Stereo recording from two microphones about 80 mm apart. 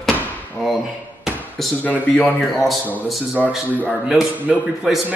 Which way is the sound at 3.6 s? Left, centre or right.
Right.